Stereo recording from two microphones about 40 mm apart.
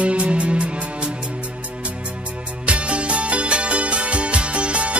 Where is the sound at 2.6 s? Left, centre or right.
Right.